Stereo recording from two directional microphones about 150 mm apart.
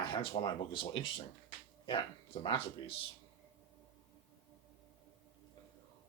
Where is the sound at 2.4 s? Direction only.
35° left (ahead or behind).